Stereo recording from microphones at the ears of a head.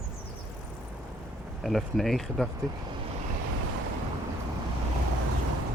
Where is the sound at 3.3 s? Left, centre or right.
Right.